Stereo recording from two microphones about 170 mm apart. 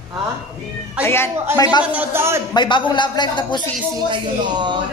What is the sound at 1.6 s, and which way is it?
Speech, 25° left (ahead or behind).